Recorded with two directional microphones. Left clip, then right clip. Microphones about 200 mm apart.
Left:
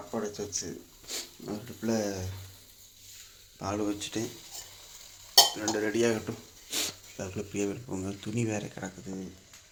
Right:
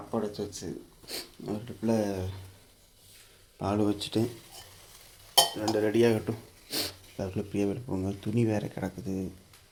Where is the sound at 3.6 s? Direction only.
35° right (ahead or behind).